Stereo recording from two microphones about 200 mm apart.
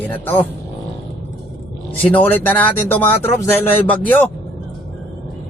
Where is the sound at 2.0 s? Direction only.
10° left (ahead or behind).